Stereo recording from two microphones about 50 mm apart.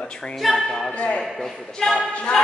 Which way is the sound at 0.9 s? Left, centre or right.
Left.